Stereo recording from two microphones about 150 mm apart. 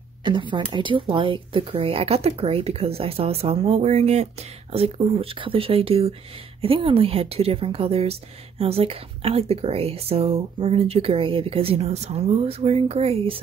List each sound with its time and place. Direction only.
0.2 s a woman's voice: 30° right (ahead or behind)